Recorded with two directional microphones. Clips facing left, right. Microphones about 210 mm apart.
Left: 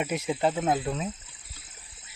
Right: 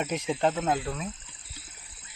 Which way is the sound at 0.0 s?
10° left (ahead or behind).